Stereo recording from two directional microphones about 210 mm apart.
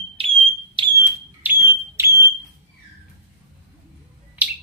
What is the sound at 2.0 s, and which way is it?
Smoke detector, 10° right (ahead or behind).